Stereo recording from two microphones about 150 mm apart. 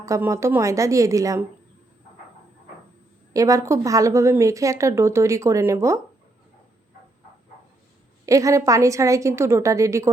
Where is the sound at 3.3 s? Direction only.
20° right (ahead or behind).